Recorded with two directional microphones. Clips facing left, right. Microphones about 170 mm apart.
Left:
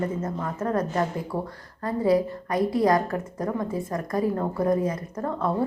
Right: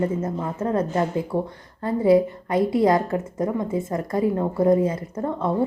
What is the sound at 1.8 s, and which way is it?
A woman's voice, 25° right (ahead or behind).